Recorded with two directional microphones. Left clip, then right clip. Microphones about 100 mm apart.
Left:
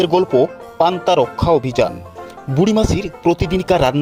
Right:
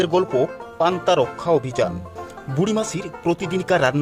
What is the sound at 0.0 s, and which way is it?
Speech, 35° left (ahead or behind).